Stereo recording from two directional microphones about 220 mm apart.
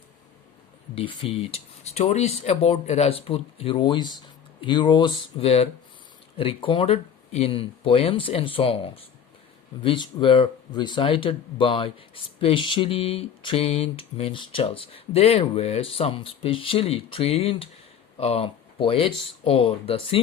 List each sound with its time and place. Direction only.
0.9 s speech: 25° left (ahead or behind)